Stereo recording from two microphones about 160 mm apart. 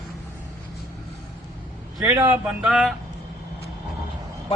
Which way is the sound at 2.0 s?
15° right (ahead or behind).